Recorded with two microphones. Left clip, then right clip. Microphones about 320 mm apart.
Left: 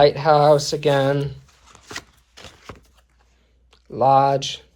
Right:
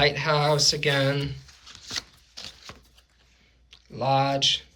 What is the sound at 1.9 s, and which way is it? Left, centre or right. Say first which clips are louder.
Shuffling cards: right 1 dB; left.